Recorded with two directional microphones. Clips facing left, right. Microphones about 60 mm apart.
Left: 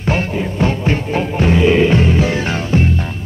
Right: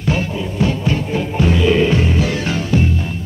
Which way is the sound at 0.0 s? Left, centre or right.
Left.